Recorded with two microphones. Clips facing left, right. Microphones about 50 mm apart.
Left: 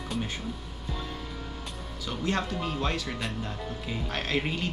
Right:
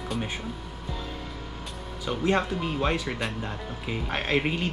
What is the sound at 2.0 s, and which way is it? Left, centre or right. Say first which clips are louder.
Speech: right 5 dB; centre.